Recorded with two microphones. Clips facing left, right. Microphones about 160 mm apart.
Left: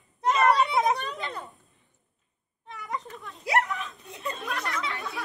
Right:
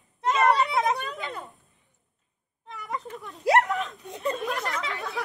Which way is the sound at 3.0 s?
20° right (ahead or behind).